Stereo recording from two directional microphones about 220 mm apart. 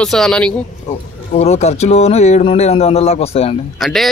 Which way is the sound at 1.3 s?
30° left (ahead or behind).